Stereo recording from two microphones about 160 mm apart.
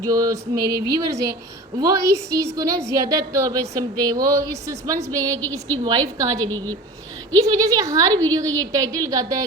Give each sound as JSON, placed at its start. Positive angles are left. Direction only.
{"t": 0.0, "sound": "a woman's voice", "side_deg": -20}
{"t": 1.8, "sound": "a woman's voice", "side_deg": -20}
{"t": 5.3, "sound": "a woman's voice", "side_deg": 10}
{"t": 5.8, "sound": "a woman's voice", "side_deg": -25}